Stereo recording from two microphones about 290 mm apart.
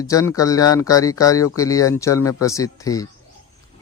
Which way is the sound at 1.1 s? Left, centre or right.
Centre.